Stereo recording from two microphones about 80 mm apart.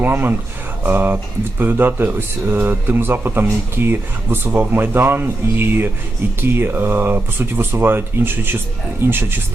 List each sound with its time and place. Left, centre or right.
0.0 s speech: right